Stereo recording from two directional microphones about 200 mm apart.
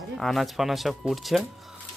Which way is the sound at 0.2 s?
Centre (ahead or behind).